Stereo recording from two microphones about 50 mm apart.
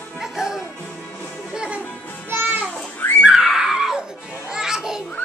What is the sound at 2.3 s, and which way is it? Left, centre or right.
Music, right.